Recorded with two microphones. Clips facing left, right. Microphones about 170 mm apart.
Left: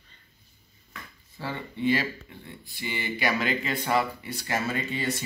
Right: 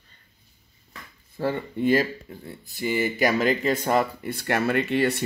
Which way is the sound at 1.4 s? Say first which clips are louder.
Right 7 dB; 50° right (ahead or behind).